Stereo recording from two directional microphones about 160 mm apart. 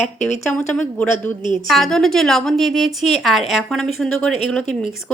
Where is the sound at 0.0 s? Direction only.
45° left (ahead or behind).